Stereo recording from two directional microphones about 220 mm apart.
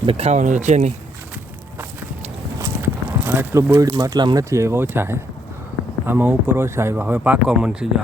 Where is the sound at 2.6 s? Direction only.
10° right (ahead or behind).